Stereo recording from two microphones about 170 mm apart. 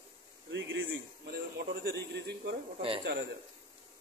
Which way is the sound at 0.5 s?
90° right.